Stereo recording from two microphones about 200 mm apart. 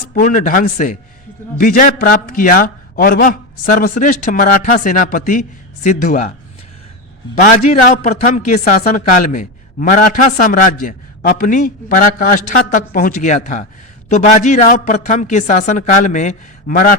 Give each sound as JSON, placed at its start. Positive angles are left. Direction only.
{"t": 0.1, "sound": "a man's voice", "side_deg": 40}
{"t": 7.6, "sound": "a man's voice", "side_deg": 35}